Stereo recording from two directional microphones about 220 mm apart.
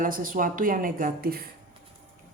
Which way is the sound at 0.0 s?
40° right (ahead or behind).